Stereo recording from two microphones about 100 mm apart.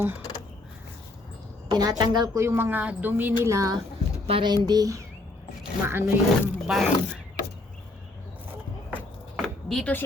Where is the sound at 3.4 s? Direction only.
35° right (ahead or behind).